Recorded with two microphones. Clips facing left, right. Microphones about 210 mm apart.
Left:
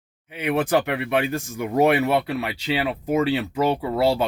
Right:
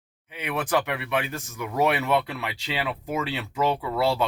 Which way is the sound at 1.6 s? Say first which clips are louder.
Left 5 dB; 45° left (ahead or behind).